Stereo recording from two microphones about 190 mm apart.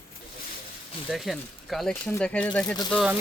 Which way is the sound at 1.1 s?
Centre (ahead or behind).